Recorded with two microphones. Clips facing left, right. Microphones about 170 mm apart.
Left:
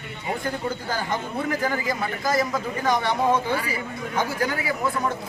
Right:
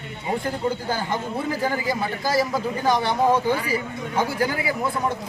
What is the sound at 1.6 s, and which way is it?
A man's voice, 30° right (ahead or behind).